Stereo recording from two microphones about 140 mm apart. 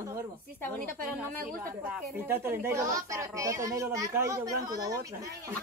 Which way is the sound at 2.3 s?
15° right (ahead or behind).